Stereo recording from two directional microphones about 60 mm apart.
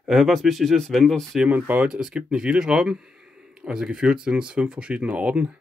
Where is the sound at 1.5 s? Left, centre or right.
Right.